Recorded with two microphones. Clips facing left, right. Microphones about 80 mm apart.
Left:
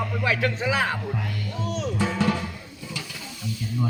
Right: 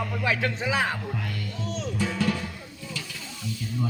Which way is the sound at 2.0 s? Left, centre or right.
Left.